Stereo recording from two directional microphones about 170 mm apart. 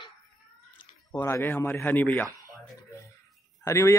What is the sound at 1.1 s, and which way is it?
Speech, 15° left (ahead or behind).